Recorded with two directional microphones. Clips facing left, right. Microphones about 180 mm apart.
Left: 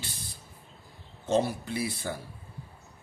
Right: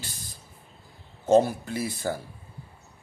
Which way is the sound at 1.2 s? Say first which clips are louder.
Right 6 dB; 45° right (ahead or behind).